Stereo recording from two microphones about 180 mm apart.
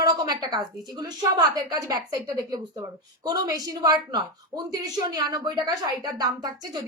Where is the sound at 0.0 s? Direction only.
20° right (ahead or behind).